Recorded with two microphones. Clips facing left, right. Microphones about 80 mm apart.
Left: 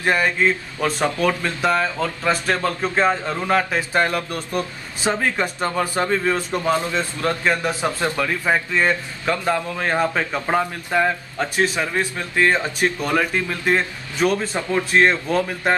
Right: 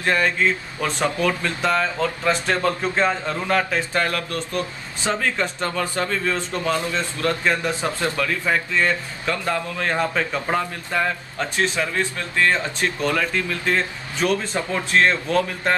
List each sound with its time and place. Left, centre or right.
0.0 s a man's voice: centre
1.6 s a man's voice: centre; by 7.0 s left
7.0 s a man's voice: centre